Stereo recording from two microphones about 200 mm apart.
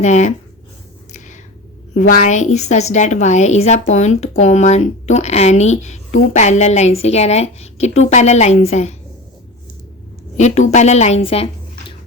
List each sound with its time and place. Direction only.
0.0 s a woman's voice: 35° left (ahead or behind)
1.9 s a woman's voice: 40° left (ahead or behind)
10.3 s a woman's voice: 35° left (ahead or behind)